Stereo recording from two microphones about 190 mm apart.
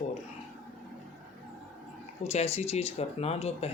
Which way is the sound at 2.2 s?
35° left (ahead or behind).